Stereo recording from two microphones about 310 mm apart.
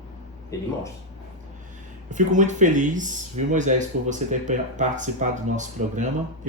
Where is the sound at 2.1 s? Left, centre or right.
Right.